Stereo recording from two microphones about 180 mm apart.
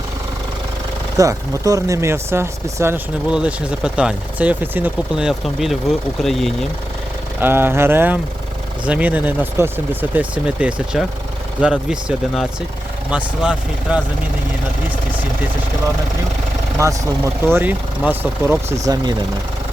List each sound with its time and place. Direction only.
1.1 s speech: 20° right (ahead or behind); by 6.7 s centre (ahead or behind)
7.4 s speech: 10° right (ahead or behind)
16.8 s speech: 20° right (ahead or behind)